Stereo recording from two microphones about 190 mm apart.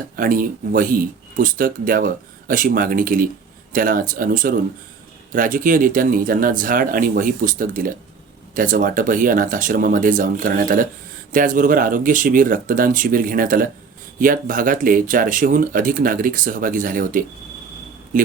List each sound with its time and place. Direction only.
0.2 s speech: 45° right (ahead or behind)